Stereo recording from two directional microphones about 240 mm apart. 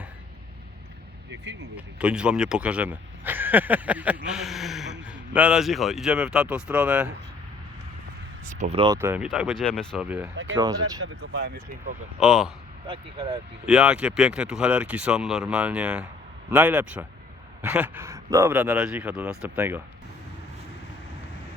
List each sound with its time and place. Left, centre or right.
1.7 s speech: centre
8.4 s speech: right
9.0 s speech: centre
12.2 s speech: centre
12.9 s speech: right
13.7 s speech: centre